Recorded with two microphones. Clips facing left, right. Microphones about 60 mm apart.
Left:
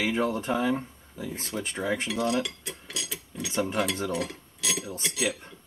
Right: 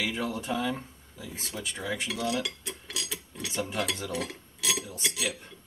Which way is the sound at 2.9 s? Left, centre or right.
Centre.